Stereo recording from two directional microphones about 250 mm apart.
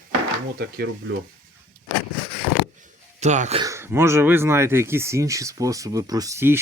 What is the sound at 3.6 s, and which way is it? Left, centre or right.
Speech, centre.